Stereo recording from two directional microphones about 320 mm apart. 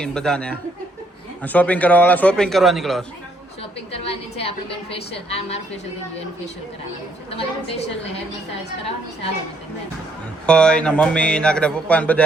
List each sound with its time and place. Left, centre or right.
0.0 s speech: centre
3.6 s a woman's voice: centre
7.3 s a woman's voice: centre
10.4 s speech: centre